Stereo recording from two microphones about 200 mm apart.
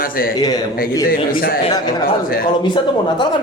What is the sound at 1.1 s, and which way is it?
Speech, 45° left (ahead or behind).